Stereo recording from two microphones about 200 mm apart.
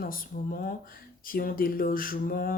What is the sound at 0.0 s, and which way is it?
Speech, 45° left (ahead or behind).